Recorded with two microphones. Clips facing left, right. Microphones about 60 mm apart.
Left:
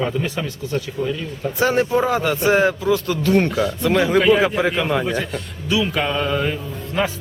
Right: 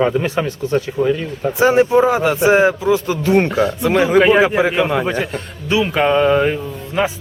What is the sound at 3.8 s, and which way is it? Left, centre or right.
Speech, centre.